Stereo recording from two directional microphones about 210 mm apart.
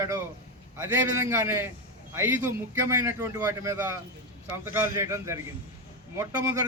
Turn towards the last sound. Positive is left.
turn(degrees=-15)  # may be behind; listen again after turning